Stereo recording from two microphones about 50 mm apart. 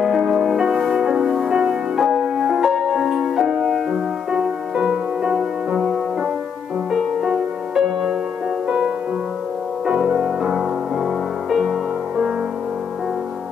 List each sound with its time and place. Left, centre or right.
0.0 s music: centre
4.7 s music: centre
8.6 s music: right